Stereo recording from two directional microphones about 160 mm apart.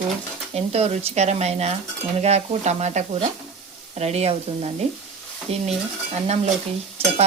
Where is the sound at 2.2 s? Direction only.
40° right (ahead or behind).